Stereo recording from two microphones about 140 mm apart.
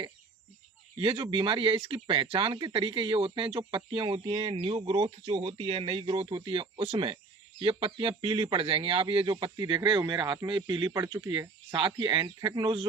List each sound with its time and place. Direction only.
0.9 s speech: 35° right (ahead or behind)